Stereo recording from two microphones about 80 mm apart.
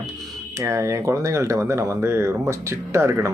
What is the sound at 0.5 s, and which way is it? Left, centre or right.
Speech, right.